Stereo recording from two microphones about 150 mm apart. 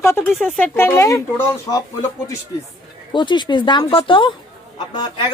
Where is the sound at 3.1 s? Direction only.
30° left (ahead or behind).